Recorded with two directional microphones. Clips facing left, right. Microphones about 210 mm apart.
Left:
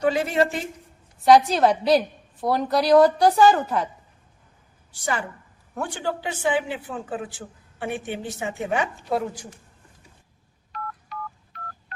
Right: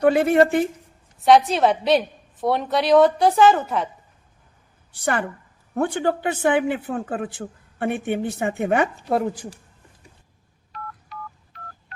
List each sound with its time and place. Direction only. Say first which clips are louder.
0.0 s a man's voice: right 5 dB; 55° right (ahead or behind)
1.2 s a woman's voice: even; centre (ahead or behind)
4.9 s a man's voice: right 4 dB; 60° right (ahead or behind)